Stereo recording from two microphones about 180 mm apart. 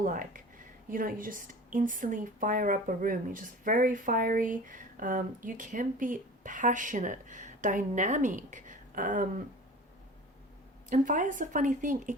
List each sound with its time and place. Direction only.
0.0 s speech: 50° right (ahead or behind)
10.8 s speech: 45° right (ahead or behind)